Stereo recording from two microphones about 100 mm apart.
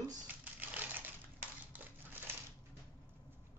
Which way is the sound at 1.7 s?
20° right (ahead or behind).